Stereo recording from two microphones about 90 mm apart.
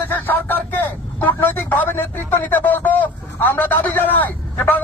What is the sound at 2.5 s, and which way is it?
A man's voice, 20° left (ahead or behind).